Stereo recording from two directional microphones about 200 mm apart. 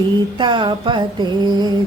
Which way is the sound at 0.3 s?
25° right (ahead or behind).